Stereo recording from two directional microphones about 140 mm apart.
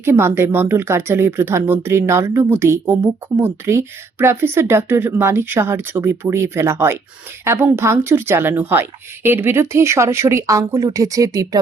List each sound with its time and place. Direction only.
0.0 s a woman's voice: 15° right (ahead or behind)